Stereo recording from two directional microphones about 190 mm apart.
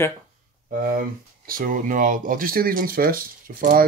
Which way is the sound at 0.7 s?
45° right (ahead or behind).